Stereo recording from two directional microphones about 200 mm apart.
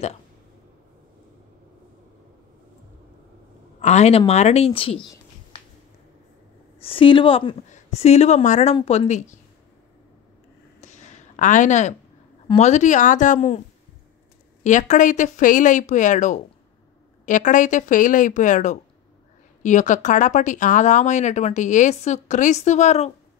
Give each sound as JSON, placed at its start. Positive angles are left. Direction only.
{"t": 3.8, "sound": "speech", "side_deg": 35}
{"t": 5.0, "sound": "a sound", "side_deg": 20}
{"t": 6.8, "sound": "speech", "side_deg": 25}
{"t": 10.8, "sound": "a sound", "side_deg": 35}
{"t": 12.5, "sound": "speech", "side_deg": 35}
{"t": 14.6, "sound": "speech", "side_deg": 35}